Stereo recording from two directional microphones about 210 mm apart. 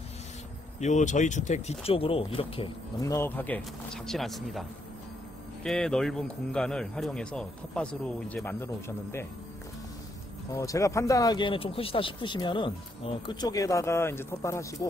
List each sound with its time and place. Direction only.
0.7 s speech: 35° left (ahead or behind)
3.1 s speech: 10° left (ahead or behind)
10.5 s speech: 15° left (ahead or behind)